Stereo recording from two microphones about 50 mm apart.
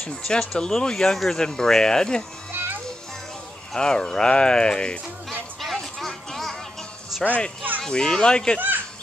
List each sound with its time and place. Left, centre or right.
0.1 s speech: centre
2.5 s music: right
3.7 s speech: centre
5.3 s a sound: centre
7.1 s music: centre
7.8 s speech: centre
8.5 s a sound: right